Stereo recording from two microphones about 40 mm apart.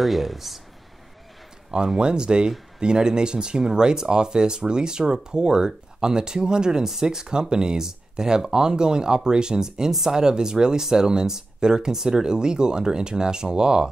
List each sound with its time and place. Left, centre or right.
0.0 s speech: centre
2.0 s speech: right